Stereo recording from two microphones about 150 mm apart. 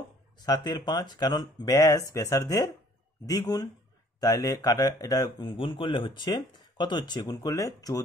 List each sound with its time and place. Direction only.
0.4 s speech: 25° left (ahead or behind)